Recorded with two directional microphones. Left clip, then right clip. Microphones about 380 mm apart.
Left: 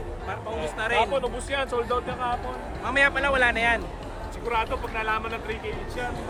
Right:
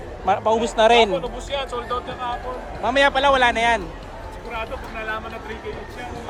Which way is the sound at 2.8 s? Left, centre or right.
Centre.